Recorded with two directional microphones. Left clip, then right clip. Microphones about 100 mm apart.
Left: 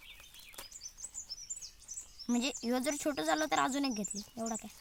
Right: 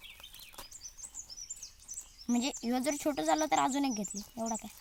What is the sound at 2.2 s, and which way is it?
Speech, 25° left (ahead or behind).